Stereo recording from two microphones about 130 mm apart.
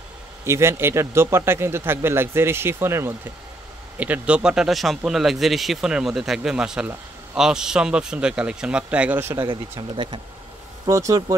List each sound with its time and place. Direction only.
0.5 s a man's voice: 20° right (ahead or behind)
9.4 s speech: 40° right (ahead or behind)
10.9 s a man's voice: 25° right (ahead or behind)